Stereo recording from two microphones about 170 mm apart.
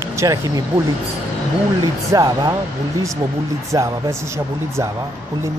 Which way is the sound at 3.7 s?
15° right (ahead or behind).